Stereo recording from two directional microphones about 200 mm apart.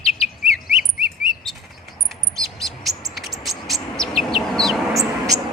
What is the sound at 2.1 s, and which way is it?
Bird, centre (ahead or behind).